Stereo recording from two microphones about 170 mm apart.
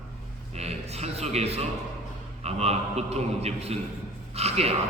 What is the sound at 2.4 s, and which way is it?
A man's voice, 40° right (ahead or behind).